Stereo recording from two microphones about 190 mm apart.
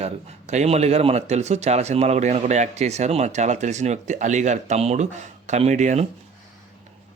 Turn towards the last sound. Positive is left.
turn(degrees=-40)  # may be behind; listen again after turning